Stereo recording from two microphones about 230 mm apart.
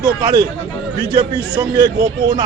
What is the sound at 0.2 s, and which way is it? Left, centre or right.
Speech, centre.